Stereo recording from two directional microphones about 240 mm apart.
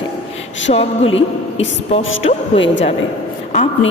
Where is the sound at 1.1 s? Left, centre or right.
Left.